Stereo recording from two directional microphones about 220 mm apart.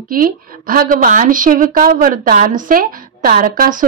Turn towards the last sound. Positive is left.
turn(degrees=-35)  # may be behind; listen again after turning